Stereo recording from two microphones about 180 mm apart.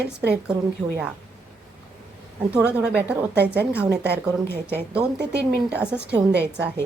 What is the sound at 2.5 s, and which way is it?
A woman's voice, 5° right (ahead or behind).